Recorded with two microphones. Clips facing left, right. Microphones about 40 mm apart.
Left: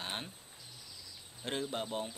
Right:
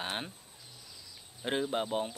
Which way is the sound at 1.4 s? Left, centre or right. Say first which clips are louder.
Right 5 dB; right.